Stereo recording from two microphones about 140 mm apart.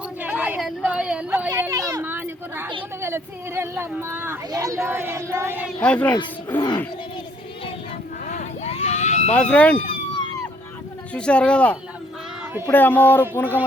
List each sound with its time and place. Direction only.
0.2 s a sound: 10° right (ahead or behind)
1.5 s a sound: 25° right (ahead or behind)
3.0 s speech: 15° right (ahead or behind)
5.8 s speech: 10° left (ahead or behind)
8.3 s vehicle: 55° left (ahead or behind)
9.3 s speech: 10° left (ahead or behind)
9.7 s police car: 40° left (ahead or behind)
11.1 s speech: 10° left (ahead or behind)